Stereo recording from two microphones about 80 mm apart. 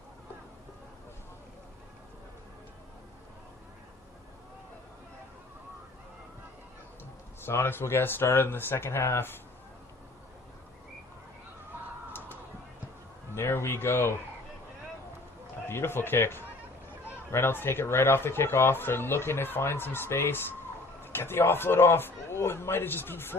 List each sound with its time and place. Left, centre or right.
7.4 s speech: left
13.3 s a sound: left
15.6 s speech: left